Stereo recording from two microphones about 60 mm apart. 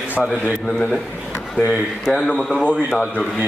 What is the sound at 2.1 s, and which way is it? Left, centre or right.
Speech, centre.